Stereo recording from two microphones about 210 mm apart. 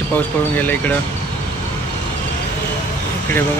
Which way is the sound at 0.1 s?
10° left (ahead or behind).